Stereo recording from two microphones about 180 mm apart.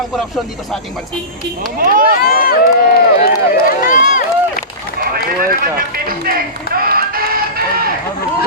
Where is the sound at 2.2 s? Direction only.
55° left (ahead or behind).